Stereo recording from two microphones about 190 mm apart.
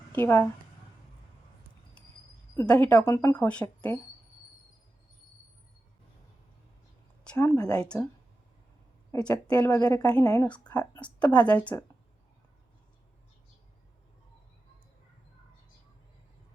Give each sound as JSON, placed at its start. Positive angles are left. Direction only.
{"t": 0.1, "sound": "a woman's voice", "side_deg": 10}
{"t": 2.6, "sound": "a woman's voice", "side_deg": 10}
{"t": 7.3, "sound": "a woman's voice", "side_deg": 15}
{"t": 9.1, "sound": "a woman's voice", "side_deg": 5}